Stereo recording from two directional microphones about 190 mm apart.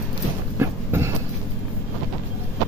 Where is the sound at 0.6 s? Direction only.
15° right (ahead or behind).